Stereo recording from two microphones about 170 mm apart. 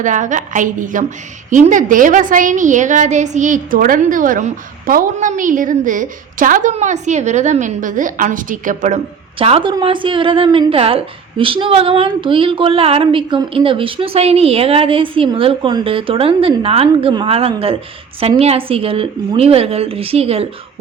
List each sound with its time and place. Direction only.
0.0 s a woman's voice: 50° right (ahead or behind)
9.4 s a woman's voice: 35° right (ahead or behind)